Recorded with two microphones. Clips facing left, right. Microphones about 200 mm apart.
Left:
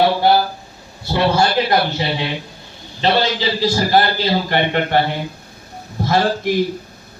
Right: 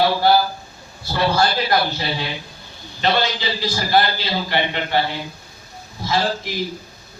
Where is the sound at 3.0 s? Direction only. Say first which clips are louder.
Left 3 dB; 35° left (ahead or behind); by 6.5 s 55° left (ahead or behind).